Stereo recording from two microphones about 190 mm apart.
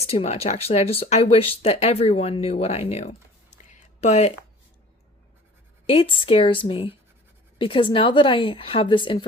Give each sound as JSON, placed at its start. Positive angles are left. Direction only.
{"t": 0.0, "sound": "speech", "side_deg": 35}
{"t": 3.7, "sound": "a sound", "side_deg": 35}
{"t": 5.8, "sound": "a woman's voice", "side_deg": 30}